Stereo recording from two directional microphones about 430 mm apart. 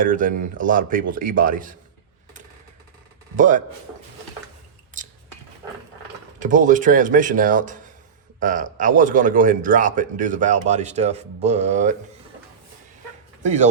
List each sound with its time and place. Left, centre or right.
0.0 s speech: centre
3.3 s a man's voice: centre
4.9 s a sound: centre
6.4 s a man's voice: centre
13.4 s speech: centre